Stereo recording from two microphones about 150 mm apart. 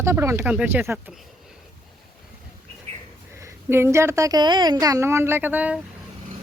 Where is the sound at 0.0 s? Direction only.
15° right (ahead or behind).